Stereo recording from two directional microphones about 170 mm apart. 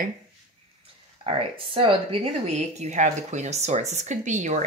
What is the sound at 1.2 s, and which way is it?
A woman's voice, 30° right (ahead or behind).